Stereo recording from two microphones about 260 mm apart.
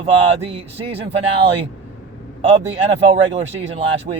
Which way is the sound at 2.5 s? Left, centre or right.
Right.